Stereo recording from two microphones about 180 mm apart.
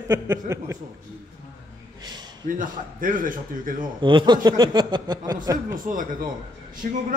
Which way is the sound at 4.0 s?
25° right (ahead or behind).